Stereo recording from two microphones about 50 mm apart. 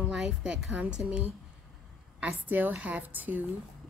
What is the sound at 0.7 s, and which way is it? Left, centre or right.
A woman's voice, right.